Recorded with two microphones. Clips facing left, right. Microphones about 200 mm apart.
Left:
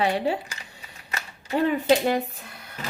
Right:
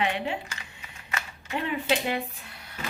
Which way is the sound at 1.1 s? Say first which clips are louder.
Left 4 dB; 40° left (ahead or behind).